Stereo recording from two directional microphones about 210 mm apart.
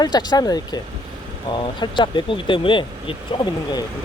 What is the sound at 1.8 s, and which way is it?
Speech, 20° left (ahead or behind).